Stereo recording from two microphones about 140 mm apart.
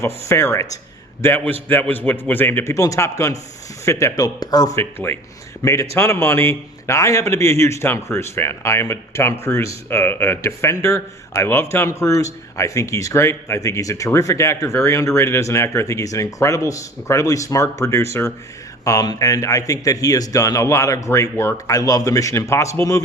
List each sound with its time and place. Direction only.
0.0 s a man's voice: 20° left (ahead or behind)